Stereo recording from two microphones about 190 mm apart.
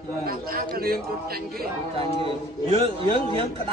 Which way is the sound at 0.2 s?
50° right (ahead or behind).